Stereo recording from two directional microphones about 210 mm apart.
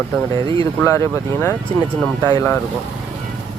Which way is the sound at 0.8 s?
15° left (ahead or behind).